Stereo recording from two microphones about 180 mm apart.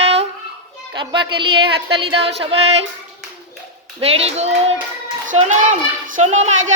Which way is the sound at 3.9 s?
35° right (ahead or behind).